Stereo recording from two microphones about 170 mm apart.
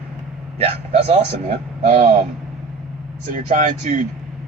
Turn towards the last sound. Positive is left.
turn(degrees=-40)  # may be behind; listen again after turning